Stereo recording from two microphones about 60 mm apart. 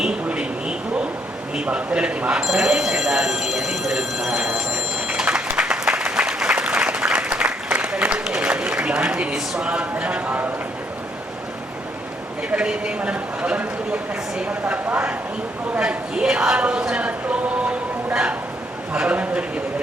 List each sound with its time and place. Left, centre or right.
0.0 s vehicle: centre
1.5 s speech: centre
2.4 s speech: centre
4.9 s applause: centre
8.4 s a man's voice: right
12.5 s speech: centre
15.8 s a sound: centre
18.9 s speech: right